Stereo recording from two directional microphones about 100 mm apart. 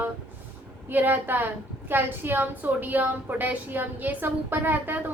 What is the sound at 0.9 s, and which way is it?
A woman's voice, 20° right (ahead or behind).